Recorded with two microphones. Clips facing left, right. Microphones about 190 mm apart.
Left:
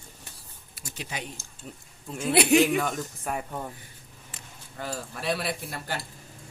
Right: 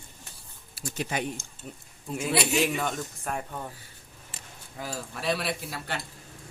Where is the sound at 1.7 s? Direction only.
Centre (ahead or behind).